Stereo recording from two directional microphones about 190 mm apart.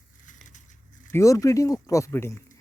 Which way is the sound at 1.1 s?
15° left (ahead or behind).